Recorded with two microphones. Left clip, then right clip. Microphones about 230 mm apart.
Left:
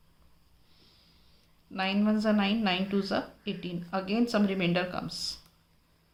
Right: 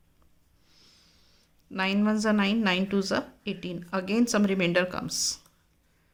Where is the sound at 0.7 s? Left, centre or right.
Right.